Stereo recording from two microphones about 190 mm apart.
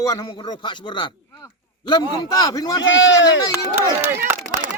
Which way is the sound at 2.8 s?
80° left.